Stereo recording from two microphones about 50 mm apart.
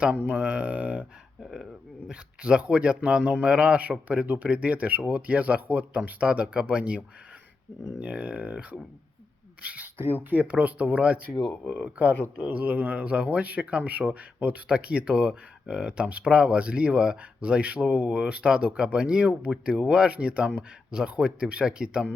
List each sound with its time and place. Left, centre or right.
0.3 s speech: right
2.0 s speech: centre
9.6 s a sound: right
10.2 s speech: right